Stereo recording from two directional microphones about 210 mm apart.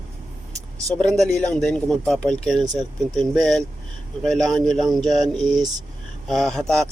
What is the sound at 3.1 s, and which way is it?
Speech, centre (ahead or behind).